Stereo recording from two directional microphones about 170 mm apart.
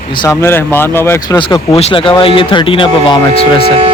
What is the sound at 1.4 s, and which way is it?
Speech, 30° left (ahead or behind).